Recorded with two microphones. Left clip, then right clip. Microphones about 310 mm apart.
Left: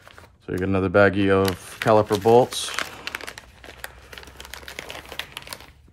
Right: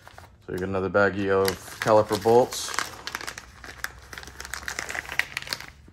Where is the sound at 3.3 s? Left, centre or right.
Centre.